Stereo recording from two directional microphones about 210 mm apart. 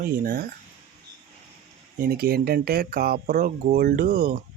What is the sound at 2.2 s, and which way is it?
Speech, 45° right (ahead or behind).